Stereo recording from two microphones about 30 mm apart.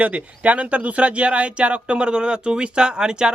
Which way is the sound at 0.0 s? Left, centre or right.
Right.